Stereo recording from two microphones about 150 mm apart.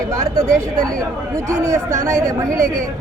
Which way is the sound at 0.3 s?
20° right (ahead or behind).